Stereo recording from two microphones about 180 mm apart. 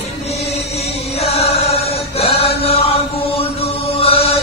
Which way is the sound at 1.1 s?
35° left (ahead or behind).